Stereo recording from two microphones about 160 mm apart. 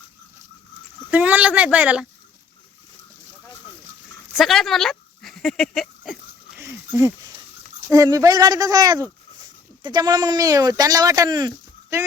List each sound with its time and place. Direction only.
1.1 s speech: 10° right (ahead or behind)
4.3 s speech: centre (ahead or behind)
6.6 s a sound: 15° right (ahead or behind)
7.9 s speech: 20° right (ahead or behind)